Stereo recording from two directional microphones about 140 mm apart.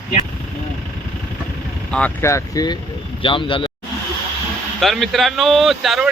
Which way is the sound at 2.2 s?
20° left (ahead or behind).